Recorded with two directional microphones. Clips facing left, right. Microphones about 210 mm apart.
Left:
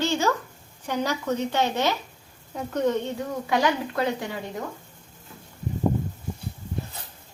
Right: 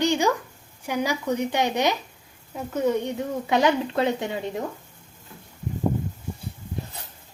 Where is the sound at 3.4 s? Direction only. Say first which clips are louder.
Right 3 dB; 20° right (ahead or behind).